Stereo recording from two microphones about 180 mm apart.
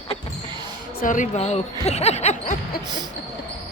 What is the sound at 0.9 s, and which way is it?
Speech, 45° left (ahead or behind).